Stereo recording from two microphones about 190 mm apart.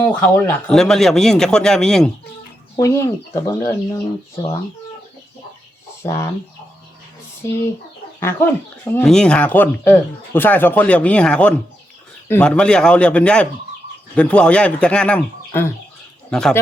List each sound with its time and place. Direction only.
0.0 s speech: 10° left (ahead or behind)
2.7 s speech: 15° left (ahead or behind)
6.0 s speech: 15° left (ahead or behind)
7.4 s speech: 15° left (ahead or behind)